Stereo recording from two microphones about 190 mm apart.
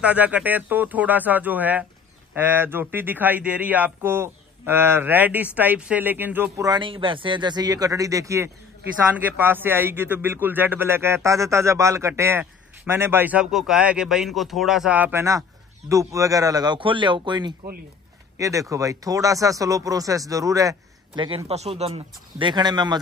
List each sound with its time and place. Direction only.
0.0 s a man's voice: 10° right (ahead or behind)
6.7 s a man's voice: 25° right (ahead or behind)